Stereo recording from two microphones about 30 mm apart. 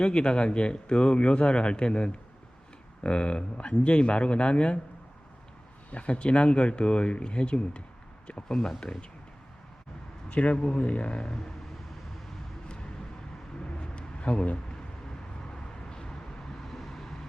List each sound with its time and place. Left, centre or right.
0.0 s speech: left
5.9 s speech: left
8.4 s speech: centre
8.8 s speech: left
10.2 s a man's voice: left
10.6 s speech: left
12.6 s vehicle: left
15.5 s vehicle: left
16.6 s vehicle: centre